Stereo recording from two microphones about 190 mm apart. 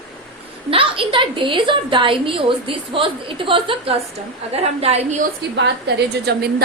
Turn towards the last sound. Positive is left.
turn(degrees=-60)  # may be behind; listen again after turning